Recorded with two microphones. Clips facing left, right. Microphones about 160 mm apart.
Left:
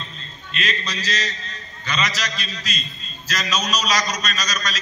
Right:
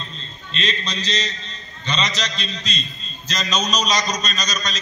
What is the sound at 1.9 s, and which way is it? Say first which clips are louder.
A man's voice: right 1 dB; 25° right (ahead or behind).